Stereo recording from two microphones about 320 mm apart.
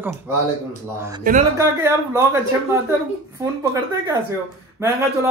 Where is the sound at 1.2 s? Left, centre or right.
Right.